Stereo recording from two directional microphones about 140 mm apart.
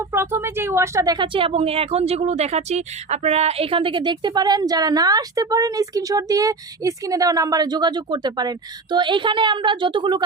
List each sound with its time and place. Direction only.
0.1 s speech: 15° right (ahead or behind); by 10.2 s 35° right (ahead or behind)